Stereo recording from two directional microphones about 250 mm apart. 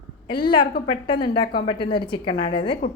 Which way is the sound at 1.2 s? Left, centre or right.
Centre.